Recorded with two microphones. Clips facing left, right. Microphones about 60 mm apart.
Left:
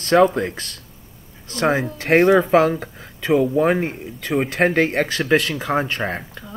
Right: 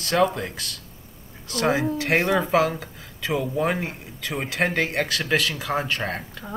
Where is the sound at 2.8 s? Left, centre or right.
Left.